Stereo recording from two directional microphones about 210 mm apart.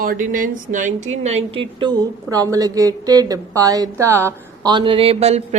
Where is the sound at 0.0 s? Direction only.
40° right (ahead or behind).